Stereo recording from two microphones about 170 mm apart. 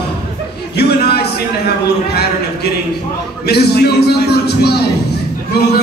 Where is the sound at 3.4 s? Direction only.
70° left (ahead or behind).